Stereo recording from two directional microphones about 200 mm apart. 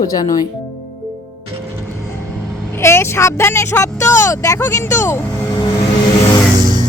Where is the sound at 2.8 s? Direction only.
15° left (ahead or behind).